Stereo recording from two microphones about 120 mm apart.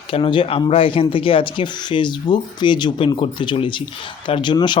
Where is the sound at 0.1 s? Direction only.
45° left (ahead or behind).